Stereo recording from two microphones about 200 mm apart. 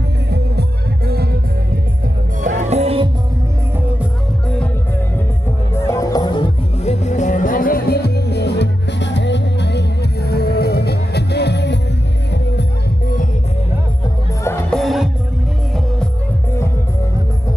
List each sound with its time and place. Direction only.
0.3 s music: 55° right (ahead or behind)
2.6 s music: 35° right (ahead or behind)
5.8 s music: 15° left (ahead or behind); by 11.8 s 60° left (ahead or behind)
14.7 s music: centre (ahead or behind)